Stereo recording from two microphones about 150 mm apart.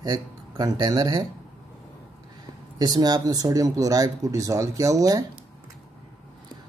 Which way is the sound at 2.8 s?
25° right (ahead or behind).